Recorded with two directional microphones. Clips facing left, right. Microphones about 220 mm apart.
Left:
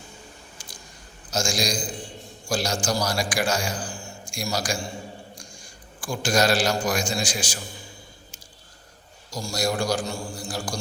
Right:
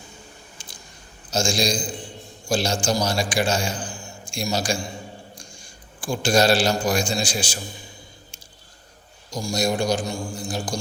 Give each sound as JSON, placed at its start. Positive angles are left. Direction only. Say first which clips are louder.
{"t": 0.6, "sound": "a sound", "louder": "even", "side_deg": -25}
{"t": 1.3, "sound": "a man's voice", "louder": "right 3 dB", "side_deg": -25}
{"t": 6.0, "sound": "a man's voice", "louder": "right 3 dB", "side_deg": -25}
{"t": 9.3, "sound": "a man's voice", "louder": "right 3 dB", "side_deg": -20}